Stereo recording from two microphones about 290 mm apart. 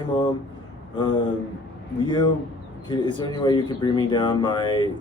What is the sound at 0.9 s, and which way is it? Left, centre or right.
Speech, centre.